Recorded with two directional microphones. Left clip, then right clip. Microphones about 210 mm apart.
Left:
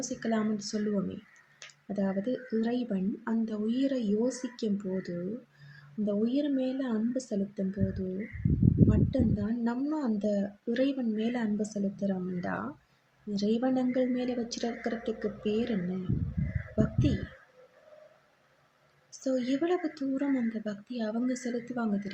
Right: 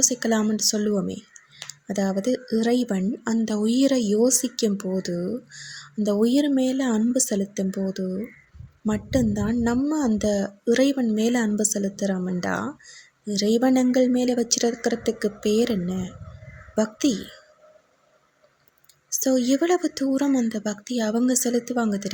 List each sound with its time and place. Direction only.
0.0 s a woman's voice: 50° right (ahead or behind)
19.2 s a woman's voice: 45° right (ahead or behind)